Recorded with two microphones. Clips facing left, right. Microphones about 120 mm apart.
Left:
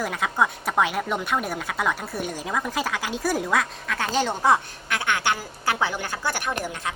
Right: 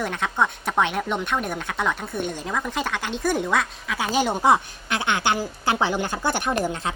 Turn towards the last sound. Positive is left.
turn(degrees=-30)  # may be behind; listen again after turning